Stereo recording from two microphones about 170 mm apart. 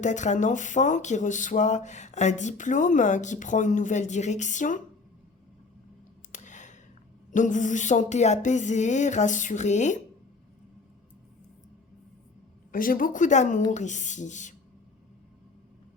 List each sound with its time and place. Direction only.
0.0 s speech: 45° left (ahead or behind)
6.3 s a sound: 45° left (ahead or behind)
7.3 s speech: 45° left (ahead or behind)
12.7 s speech: 55° left (ahead or behind)